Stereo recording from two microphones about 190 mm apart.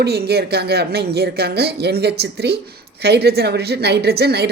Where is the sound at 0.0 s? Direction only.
60° right (ahead or behind).